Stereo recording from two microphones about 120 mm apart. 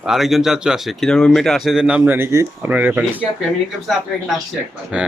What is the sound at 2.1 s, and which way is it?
Speech, 20° right (ahead or behind).